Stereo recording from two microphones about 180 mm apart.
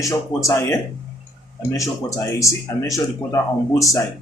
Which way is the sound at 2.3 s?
15° left (ahead or behind).